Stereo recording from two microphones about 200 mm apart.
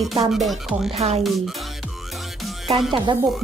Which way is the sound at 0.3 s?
Centre (ahead or behind).